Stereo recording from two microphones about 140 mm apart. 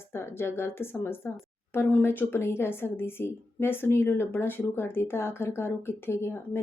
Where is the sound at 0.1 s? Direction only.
15° left (ahead or behind).